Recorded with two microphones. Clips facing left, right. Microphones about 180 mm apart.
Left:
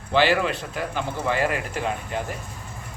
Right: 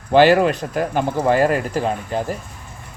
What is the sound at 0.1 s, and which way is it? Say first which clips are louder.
Speech: right 8 dB; 45° right (ahead or behind).